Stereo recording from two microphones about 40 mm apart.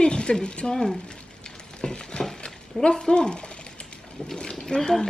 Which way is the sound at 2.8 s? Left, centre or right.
Left.